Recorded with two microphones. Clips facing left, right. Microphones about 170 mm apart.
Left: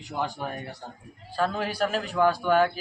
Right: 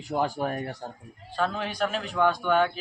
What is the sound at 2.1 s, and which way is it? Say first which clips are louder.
Speech: left 1 dB; 10° left (ahead or behind).